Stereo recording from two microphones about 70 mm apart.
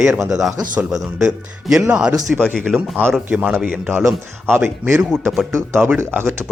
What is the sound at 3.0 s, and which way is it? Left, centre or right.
Speech, right.